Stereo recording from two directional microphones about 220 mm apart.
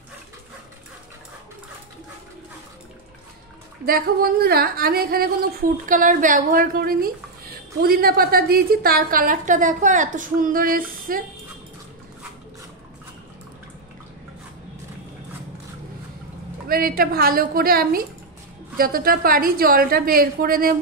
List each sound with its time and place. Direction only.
3.8 s a woman's voice: 45° right (ahead or behind)
16.6 s a woman's voice: 40° right (ahead or behind)